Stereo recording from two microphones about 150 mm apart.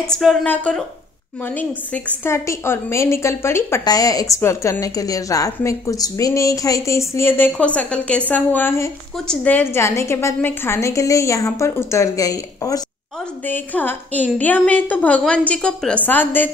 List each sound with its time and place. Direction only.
0.0 s a woman's voice: centre (ahead or behind); by 12.8 s 25° left (ahead or behind)
13.5 s a woman's voice: 10° left (ahead or behind)